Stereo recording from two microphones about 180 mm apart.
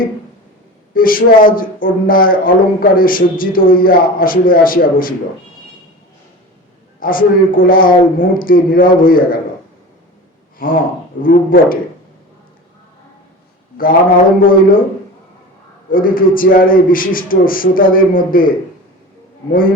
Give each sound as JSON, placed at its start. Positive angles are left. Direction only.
{"t": 0.9, "sound": "a man's voice", "side_deg": 50}
{"t": 7.0, "sound": "a man's voice", "side_deg": 50}
{"t": 10.6, "sound": "a man's voice", "side_deg": 50}
{"t": 14.4, "sound": "a man's voice", "side_deg": 50}
{"t": 15.9, "sound": "a man's voice", "side_deg": 50}